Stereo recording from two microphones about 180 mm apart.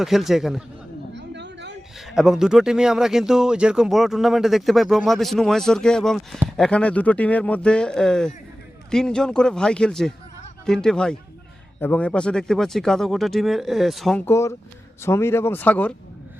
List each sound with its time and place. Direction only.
0.0 s speech: centre (ahead or behind)
1.1 s chatter: 75° right (ahead or behind)
2.0 s speech: centre (ahead or behind)
14.3 s speech: 15° left (ahead or behind)